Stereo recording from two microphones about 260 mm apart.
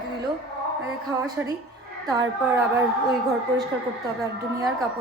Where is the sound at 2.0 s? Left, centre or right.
Centre.